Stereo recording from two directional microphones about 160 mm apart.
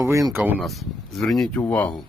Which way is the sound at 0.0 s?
20° right (ahead or behind).